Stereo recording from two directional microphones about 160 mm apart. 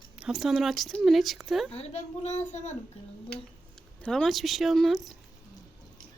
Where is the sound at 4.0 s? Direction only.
5° left (ahead or behind).